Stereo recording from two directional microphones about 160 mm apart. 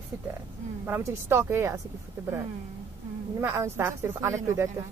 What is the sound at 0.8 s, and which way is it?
Speech, 15° right (ahead or behind).